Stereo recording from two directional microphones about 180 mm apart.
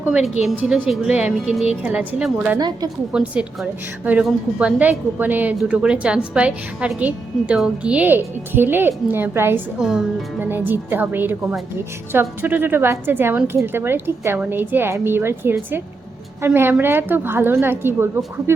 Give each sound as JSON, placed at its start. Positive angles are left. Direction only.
{"t": 0.0, "sound": "a woman's voice", "side_deg": -5}
{"t": 2.6, "sound": "a woman's voice", "side_deg": -20}
{"t": 3.1, "sound": "a woman's voice", "side_deg": -5}